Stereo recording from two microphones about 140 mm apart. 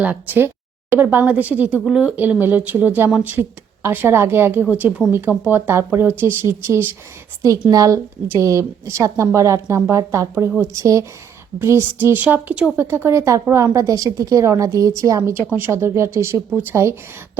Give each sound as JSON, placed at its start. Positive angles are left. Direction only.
{"t": 0.0, "sound": "a woman's voice", "side_deg": -10}